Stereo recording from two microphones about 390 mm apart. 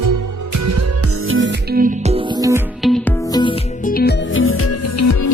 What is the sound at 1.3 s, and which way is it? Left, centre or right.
Music, right.